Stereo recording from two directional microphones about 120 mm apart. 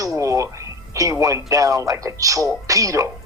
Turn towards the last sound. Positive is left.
turn(degrees=-25)  # may be behind; listen again after turning